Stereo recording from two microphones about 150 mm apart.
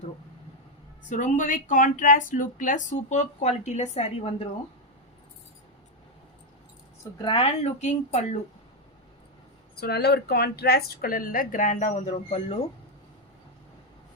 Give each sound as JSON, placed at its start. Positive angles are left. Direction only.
{"t": 1.1, "sound": "speech", "side_deg": 60}
{"t": 7.3, "sound": "speech", "side_deg": 40}
{"t": 9.7, "sound": "speech", "side_deg": 90}